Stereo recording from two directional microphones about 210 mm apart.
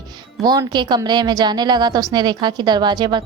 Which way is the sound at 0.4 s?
20° right (ahead or behind).